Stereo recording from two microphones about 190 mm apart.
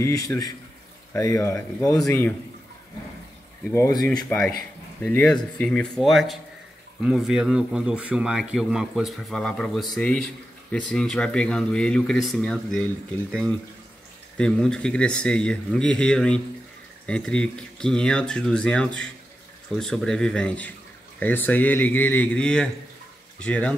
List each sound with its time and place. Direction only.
0.0 s speech: 15° left (ahead or behind)
3.7 s speech: 15° left (ahead or behind)
5.0 s a man's voice: 5° left (ahead or behind)